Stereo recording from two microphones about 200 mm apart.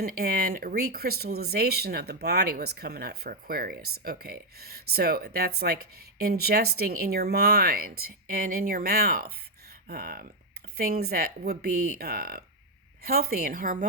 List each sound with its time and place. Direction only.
0.0 s speech: 50° right (ahead or behind)